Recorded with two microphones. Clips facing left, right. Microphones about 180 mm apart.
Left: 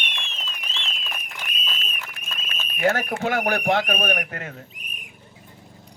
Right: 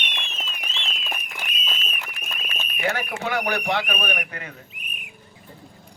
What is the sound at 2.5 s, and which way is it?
Speech, 45° left (ahead or behind).